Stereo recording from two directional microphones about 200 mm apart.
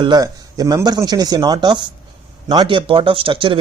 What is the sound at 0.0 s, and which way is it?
Speech, 20° right (ahead or behind).